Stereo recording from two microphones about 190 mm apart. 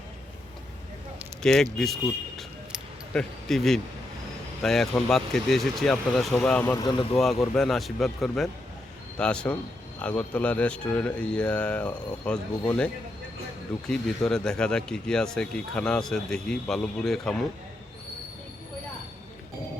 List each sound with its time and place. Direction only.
1.4 s speech: 5° left (ahead or behind)
2.7 s keys jangling: centre (ahead or behind)
4.6 s speech: centre (ahead or behind)
6.8 s speech: 25° left (ahead or behind)
7.5 s speech: centre (ahead or behind)